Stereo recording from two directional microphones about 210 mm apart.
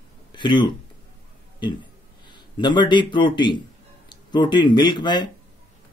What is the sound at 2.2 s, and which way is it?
A man's voice, 20° left (ahead or behind).